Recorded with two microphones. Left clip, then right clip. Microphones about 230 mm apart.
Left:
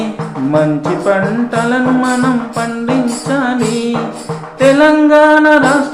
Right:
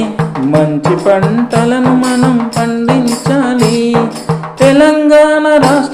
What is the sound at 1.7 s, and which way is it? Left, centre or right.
Music, right.